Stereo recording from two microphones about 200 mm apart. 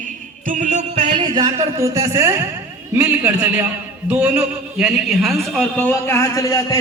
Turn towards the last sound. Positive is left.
turn(degrees=15)  # may be behind; listen again after turning